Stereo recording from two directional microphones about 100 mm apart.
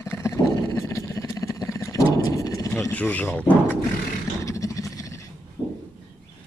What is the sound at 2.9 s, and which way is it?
Speech, 15° left (ahead or behind).